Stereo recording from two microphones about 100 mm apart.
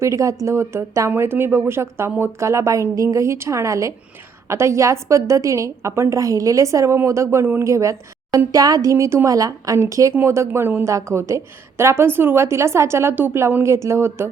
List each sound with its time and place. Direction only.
0.0 s a woman's voice: 30° right (ahead or behind)